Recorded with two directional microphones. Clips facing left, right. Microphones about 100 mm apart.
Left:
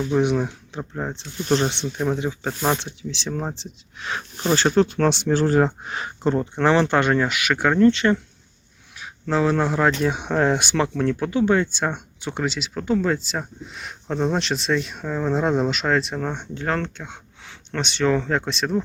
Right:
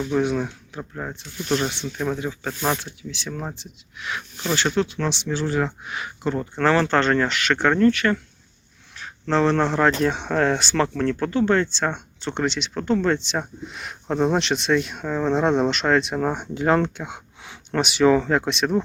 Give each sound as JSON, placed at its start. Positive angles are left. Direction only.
{"t": 0.1, "sound": "speech", "side_deg": 20}
{"t": 1.1, "sound": "speech", "side_deg": 25}
{"t": 6.6, "sound": "speech", "side_deg": 20}
{"t": 7.9, "sound": "speech", "side_deg": 20}
{"t": 9.0, "sound": "speech", "side_deg": 10}